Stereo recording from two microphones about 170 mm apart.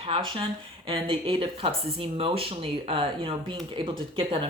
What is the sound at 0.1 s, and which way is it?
Speech, 30° right (ahead or behind).